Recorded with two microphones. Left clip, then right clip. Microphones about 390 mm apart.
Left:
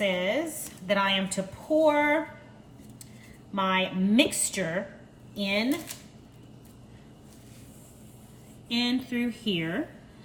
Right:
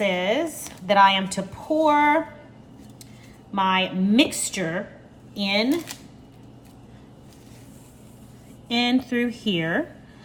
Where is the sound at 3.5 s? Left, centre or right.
Centre.